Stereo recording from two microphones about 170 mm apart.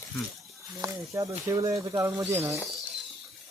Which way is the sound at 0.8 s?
20° right (ahead or behind).